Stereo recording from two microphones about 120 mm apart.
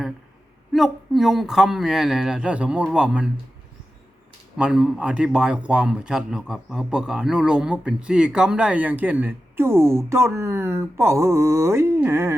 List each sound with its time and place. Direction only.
0.7 s a man's voice: centre (ahead or behind)
4.5 s a man's voice: 5° right (ahead or behind)